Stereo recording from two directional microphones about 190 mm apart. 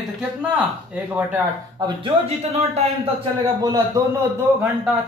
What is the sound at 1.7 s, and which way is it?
Speech, 25° right (ahead or behind).